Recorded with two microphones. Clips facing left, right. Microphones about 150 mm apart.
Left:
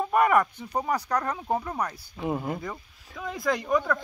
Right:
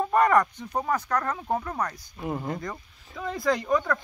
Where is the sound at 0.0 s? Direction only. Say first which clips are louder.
Right 1 dB; 10° left (ahead or behind).